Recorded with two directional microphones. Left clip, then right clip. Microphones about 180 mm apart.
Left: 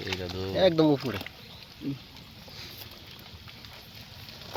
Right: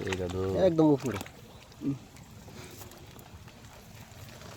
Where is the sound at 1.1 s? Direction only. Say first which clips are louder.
Left 2 dB; 50° right (ahead or behind).